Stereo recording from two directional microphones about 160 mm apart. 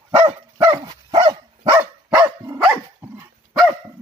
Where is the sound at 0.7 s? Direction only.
25° right (ahead or behind).